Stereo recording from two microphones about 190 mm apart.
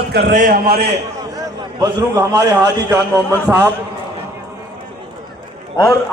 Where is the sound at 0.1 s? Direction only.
60° right (ahead or behind).